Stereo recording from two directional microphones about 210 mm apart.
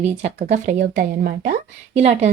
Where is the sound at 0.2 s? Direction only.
35° right (ahead or behind).